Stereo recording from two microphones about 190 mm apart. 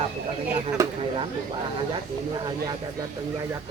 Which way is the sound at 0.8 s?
15° right (ahead or behind).